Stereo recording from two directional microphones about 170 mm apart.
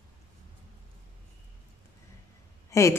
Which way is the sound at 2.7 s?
15° left (ahead or behind).